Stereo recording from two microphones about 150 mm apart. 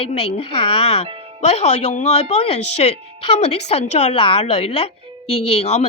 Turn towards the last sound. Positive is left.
turn(degrees=45)  # may be behind; listen again after turning